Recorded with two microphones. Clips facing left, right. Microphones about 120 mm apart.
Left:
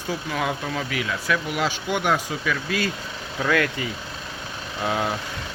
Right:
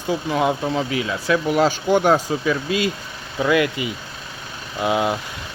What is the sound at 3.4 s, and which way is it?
Speech, 10° right (ahead or behind).